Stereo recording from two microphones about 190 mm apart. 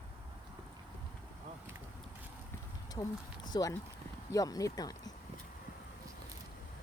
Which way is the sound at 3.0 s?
25° left (ahead or behind).